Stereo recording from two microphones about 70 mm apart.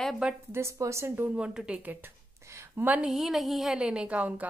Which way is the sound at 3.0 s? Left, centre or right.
Centre.